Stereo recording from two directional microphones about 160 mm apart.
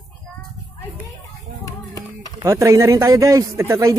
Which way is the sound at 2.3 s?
20° right (ahead or behind).